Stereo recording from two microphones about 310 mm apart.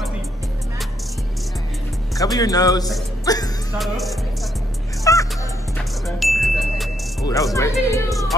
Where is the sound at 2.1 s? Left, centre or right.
Centre.